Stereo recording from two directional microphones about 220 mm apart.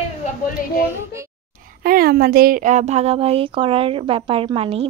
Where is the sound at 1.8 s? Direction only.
45° right (ahead or behind).